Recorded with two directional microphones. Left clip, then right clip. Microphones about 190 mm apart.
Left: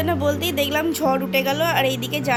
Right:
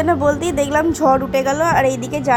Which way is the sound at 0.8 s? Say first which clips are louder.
Right 6 dB; centre (ahead or behind).